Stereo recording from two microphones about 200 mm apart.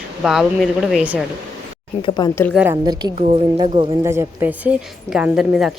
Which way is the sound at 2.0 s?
20° left (ahead or behind).